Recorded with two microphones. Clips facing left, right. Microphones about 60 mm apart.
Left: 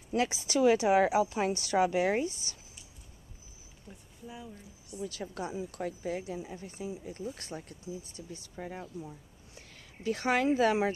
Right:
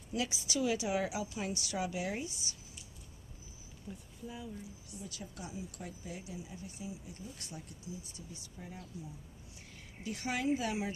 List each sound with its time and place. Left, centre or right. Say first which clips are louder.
0.1 s a woman's voice: left 7 dB; left
3.9 s speech: right 4 dB; centre
4.9 s speech: left 10 dB; left
5.8 s speech: left 11 dB; left
6.2 s speech: left 7 dB; left
8.6 s speech: left 9 dB; left
10.0 s speech: left 7 dB; left